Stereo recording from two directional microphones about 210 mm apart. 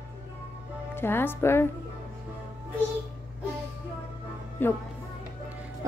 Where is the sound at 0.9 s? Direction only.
10° left (ahead or behind).